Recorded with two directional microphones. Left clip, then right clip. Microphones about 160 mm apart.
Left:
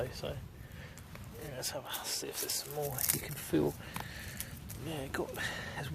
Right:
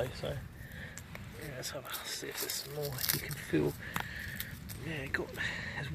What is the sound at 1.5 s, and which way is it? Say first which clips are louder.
Speech: left 2 dB; 10° left (ahead or behind).